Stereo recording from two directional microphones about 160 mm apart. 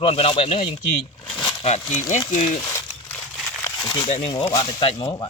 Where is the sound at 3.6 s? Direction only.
25° left (ahead or behind).